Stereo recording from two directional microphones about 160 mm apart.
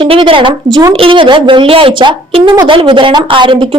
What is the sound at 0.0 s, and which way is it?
Speech, 35° right (ahead or behind).